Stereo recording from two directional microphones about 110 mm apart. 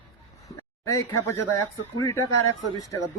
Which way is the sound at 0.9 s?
25° left (ahead or behind).